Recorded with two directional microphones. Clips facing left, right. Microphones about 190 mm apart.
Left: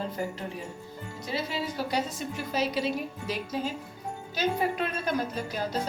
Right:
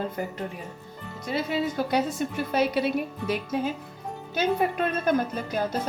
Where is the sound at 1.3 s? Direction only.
55° right (ahead or behind).